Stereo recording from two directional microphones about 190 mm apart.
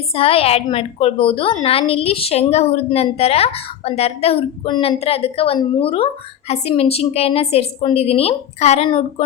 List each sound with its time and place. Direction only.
0.1 s a woman's voice: 30° left (ahead or behind)